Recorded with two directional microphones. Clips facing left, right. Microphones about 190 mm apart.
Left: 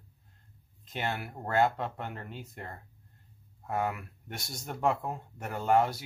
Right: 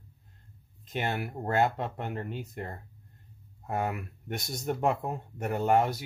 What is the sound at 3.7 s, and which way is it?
Speech, 20° right (ahead or behind).